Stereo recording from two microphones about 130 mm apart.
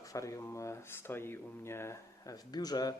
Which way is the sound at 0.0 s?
25° left (ahead or behind).